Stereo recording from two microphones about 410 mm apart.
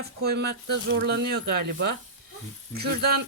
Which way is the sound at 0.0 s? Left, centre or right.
Right.